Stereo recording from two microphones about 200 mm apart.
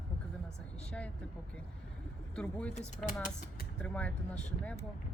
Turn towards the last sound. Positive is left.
turn(degrees=10)  # may be behind; listen again after turning